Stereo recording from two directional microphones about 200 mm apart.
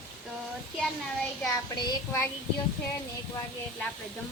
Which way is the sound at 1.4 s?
15° left (ahead or behind).